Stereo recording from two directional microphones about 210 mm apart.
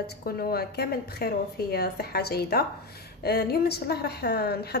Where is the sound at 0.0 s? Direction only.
45° left (ahead or behind).